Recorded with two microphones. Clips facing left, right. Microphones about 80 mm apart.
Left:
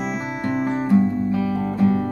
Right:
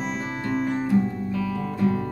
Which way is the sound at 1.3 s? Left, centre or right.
Left.